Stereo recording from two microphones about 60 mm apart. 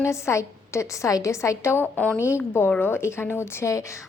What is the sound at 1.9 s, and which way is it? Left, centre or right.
Speech, centre.